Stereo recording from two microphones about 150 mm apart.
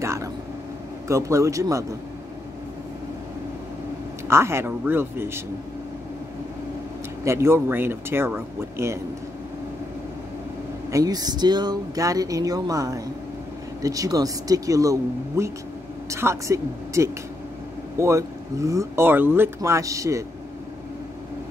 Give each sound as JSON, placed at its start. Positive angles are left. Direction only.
{"t": 0.0, "sound": "vehicle", "side_deg": -20}
{"t": 1.0, "sound": "speech", "side_deg": -20}
{"t": 4.3, "sound": "speech", "side_deg": -15}
{"t": 7.2, "sound": "speech", "side_deg": -15}
{"t": 10.9, "sound": "speech", "side_deg": -25}